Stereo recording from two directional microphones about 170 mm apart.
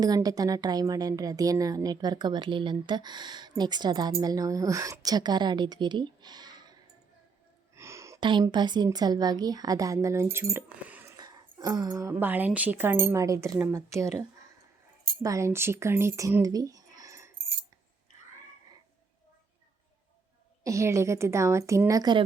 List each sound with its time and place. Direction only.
0.0 s a woman's voice: 20° right (ahead or behind)
7.8 s gasp: 15° right (ahead or behind)
8.3 s a woman's voice: 25° right (ahead or behind); by 11.1 s 10° right (ahead or behind)
11.2 s a woman's voice: 25° right (ahead or behind)
15.2 s speech: 20° right (ahead or behind)
20.7 s a woman's voice: 15° right (ahead or behind)